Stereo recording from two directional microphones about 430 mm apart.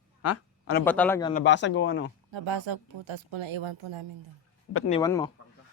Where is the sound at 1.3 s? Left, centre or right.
Left.